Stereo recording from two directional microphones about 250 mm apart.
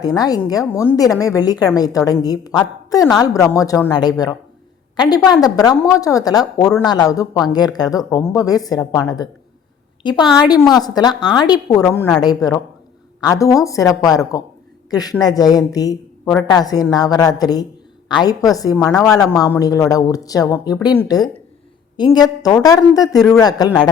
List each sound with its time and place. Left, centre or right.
0.0 s a woman's voice: centre